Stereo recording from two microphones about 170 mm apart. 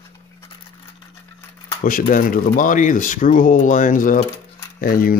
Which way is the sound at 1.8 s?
55° left (ahead or behind).